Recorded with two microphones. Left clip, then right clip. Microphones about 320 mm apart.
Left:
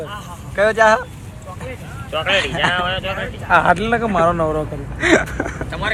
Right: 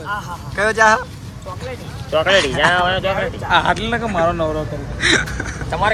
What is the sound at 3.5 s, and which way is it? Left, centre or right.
Speech, centre.